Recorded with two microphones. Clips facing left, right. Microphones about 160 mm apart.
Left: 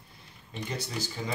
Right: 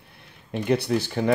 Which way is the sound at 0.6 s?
65° right (ahead or behind).